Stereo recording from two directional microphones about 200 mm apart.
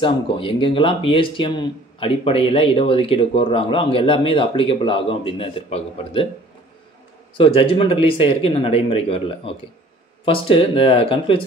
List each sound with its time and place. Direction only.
0.0 s speech: 25° left (ahead or behind)
7.3 s speech: 25° left (ahead or behind)